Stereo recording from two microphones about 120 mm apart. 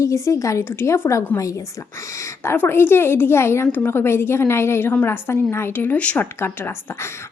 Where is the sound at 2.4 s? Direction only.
15° left (ahead or behind).